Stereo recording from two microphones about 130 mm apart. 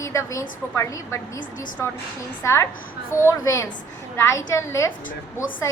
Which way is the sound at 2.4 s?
20° left (ahead or behind).